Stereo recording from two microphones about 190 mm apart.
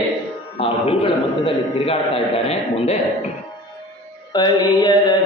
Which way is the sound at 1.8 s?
30° left (ahead or behind).